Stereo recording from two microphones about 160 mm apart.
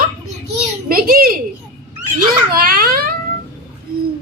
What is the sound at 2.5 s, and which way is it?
Speech, 70° right (ahead or behind).